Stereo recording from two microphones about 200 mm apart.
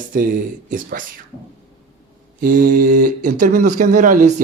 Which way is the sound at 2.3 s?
45° right (ahead or behind).